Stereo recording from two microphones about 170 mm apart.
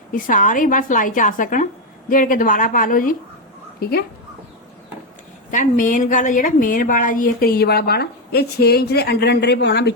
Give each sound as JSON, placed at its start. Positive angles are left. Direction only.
{"t": 0.1, "sound": "a woman's voice", "side_deg": 50}
{"t": 3.8, "sound": "speech", "side_deg": 65}
{"t": 5.5, "sound": "a woman's voice", "side_deg": 50}